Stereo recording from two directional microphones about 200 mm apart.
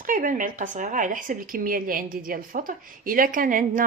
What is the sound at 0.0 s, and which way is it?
A woman's voice, 40° right (ahead or behind).